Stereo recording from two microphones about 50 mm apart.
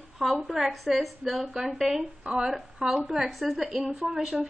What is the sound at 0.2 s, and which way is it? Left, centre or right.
A woman's voice, centre.